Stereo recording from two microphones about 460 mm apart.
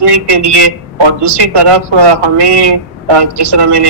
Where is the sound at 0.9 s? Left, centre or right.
Right.